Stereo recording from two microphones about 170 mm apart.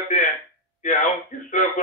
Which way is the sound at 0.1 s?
40° left (ahead or behind).